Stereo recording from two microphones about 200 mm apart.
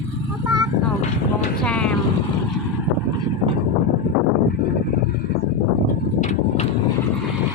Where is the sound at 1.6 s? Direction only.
5° left (ahead or behind).